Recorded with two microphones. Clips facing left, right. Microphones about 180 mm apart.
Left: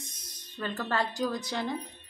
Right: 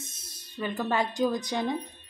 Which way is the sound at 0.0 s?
5° right (ahead or behind).